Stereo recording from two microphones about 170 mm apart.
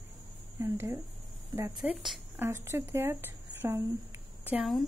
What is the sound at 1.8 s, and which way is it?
Speech, 5° right (ahead or behind).